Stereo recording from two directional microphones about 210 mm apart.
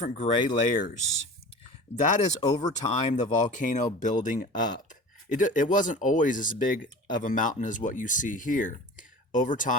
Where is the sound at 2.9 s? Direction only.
35° left (ahead or behind).